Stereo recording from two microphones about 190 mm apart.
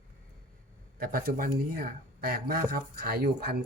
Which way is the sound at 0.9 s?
50° right (ahead or behind).